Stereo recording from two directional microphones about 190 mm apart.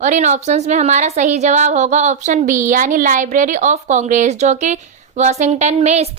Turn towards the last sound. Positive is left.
turn(degrees=-35)  # may be behind; listen again after turning